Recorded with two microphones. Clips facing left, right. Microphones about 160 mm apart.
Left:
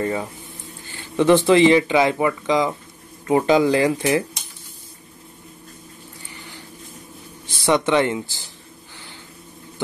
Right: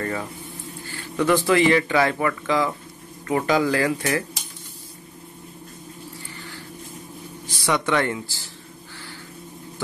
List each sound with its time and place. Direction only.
0.0 s speech: 20° left (ahead or behind)
6.3 s a sound: 20° left (ahead or behind)
7.4 s speech: 25° left (ahead or behind)